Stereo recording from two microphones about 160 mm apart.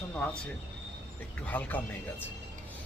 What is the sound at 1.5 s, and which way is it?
Speech, 10° left (ahead or behind).